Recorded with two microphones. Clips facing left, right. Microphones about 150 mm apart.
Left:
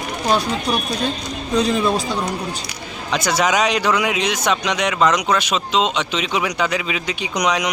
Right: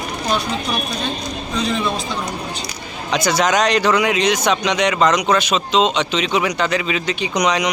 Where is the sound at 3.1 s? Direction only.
5° left (ahead or behind).